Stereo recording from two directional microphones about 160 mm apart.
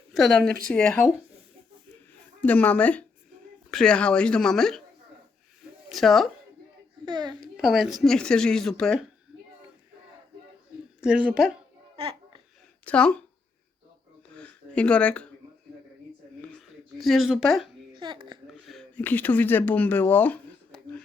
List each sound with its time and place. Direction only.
0.1 s speech: centre (ahead or behind)
2.4 s speech: 10° left (ahead or behind)
5.9 s speech: centre (ahead or behind)
7.0 s a child's voice: 25° right (ahead or behind)
7.5 s speech: centre (ahead or behind)
11.0 s speech: 5° right (ahead or behind)
11.9 s babbling: 35° right (ahead or behind)
12.8 s speech: 10° left (ahead or behind)
14.3 s a sound: 5° left (ahead or behind)
16.4 s a sound: centre (ahead or behind)
17.9 s speech: 30° right (ahead or behind)
18.4 s speech: centre (ahead or behind)